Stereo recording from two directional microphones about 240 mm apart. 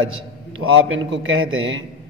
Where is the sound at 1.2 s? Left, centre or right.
Right.